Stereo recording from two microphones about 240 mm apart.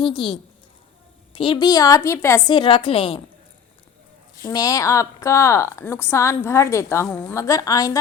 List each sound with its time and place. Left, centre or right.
0.0 s a woman's voice: left
4.4 s a woman's voice: centre